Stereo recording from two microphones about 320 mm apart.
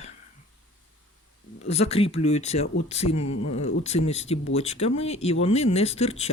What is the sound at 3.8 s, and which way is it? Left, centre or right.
Speech, centre.